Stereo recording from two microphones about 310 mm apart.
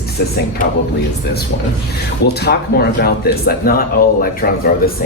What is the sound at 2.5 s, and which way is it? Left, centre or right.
Speech, left.